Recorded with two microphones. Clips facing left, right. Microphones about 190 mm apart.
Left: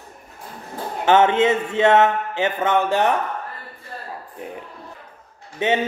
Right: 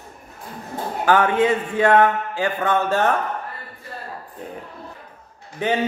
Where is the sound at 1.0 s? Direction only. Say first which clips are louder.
Left 2 dB; 25° left (ahead or behind).